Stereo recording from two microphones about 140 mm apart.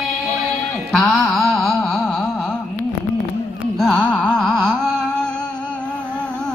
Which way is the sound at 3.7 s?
5° left (ahead or behind).